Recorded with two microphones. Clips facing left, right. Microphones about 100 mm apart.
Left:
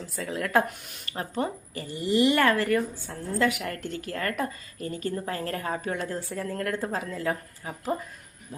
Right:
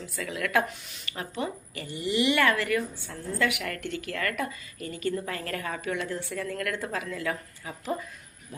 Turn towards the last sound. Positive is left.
turn(degrees=35)  # may be behind; listen again after turning